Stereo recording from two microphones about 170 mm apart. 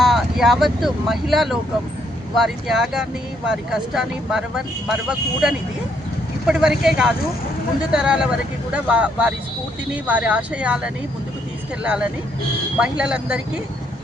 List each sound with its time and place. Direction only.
0.0 s speech: centre (ahead or behind)